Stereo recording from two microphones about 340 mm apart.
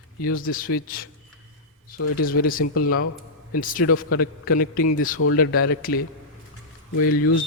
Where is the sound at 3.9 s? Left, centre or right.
Left.